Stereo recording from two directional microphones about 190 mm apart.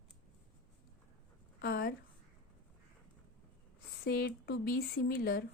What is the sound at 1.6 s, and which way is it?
Speech, 55° left (ahead or behind).